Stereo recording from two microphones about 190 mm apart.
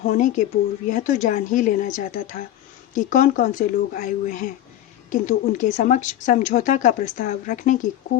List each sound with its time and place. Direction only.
0.0 s speech: 45° left (ahead or behind)